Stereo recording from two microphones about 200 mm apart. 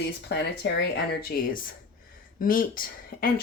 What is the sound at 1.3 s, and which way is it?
Speech, 45° left (ahead or behind).